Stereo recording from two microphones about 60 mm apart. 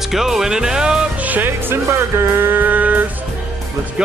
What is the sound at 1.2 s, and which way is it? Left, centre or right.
Music, right.